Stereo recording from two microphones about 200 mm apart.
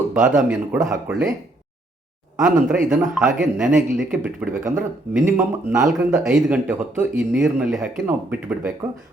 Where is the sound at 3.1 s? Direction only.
5° right (ahead or behind).